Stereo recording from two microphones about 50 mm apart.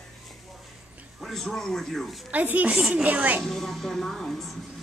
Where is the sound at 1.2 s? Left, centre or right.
Centre.